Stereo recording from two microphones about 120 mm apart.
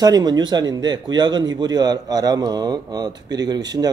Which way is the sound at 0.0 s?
35° right (ahead or behind).